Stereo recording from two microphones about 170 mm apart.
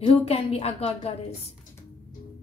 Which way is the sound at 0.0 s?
35° left (ahead or behind).